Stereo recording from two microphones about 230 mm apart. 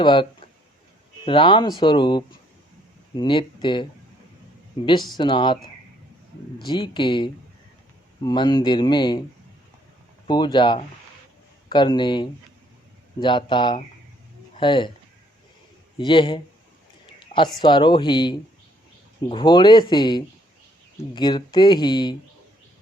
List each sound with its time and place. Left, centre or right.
0.0 s speech: left
5.1 s speech: left
10.2 s speech: centre
16.0 s speech: left
17.2 s a sound: left
17.6 s speech: centre